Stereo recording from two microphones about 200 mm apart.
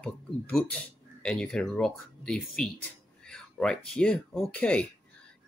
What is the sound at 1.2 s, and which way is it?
Speech, 5° left (ahead or behind).